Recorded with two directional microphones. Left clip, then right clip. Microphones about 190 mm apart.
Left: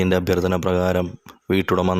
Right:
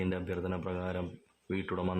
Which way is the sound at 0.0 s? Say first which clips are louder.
Left 16 dB; 45° left (ahead or behind).